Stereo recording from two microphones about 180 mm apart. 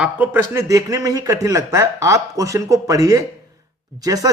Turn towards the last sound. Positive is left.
turn(degrees=-20)  # may be behind; listen again after turning